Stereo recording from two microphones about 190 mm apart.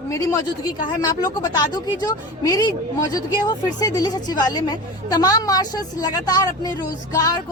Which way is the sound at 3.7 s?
20° left (ahead or behind).